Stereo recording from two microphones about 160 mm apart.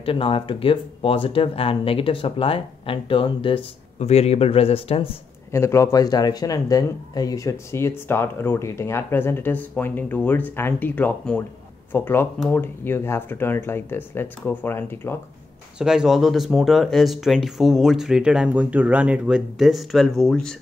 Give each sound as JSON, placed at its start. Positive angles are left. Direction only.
{"t": 0.0, "sound": "speech", "side_deg": 35}
{"t": 5.5, "sound": "speech", "side_deg": 15}
{"t": 15.8, "sound": "speech", "side_deg": -5}